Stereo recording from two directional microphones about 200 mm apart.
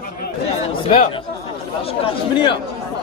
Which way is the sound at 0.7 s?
25° left (ahead or behind).